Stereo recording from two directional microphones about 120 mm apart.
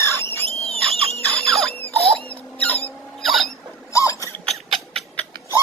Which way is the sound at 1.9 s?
15° left (ahead or behind).